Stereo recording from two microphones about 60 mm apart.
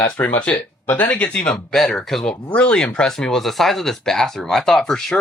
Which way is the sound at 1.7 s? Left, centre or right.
Centre.